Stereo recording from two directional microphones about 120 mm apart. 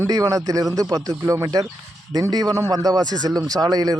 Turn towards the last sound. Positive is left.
turn(degrees=-35)  # may be behind; listen again after turning